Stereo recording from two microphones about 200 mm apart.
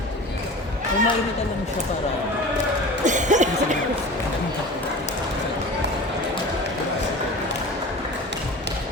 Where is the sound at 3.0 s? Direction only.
40° right (ahead or behind).